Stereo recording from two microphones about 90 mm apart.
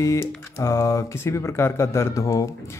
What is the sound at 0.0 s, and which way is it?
Speech, 35° left (ahead or behind).